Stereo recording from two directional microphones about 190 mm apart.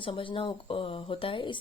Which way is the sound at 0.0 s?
25° left (ahead or behind).